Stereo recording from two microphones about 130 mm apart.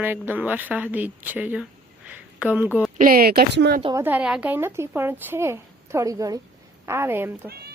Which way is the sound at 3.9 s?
15° right (ahead or behind).